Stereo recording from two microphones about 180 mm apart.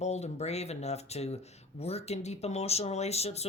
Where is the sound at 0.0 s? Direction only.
40° left (ahead or behind).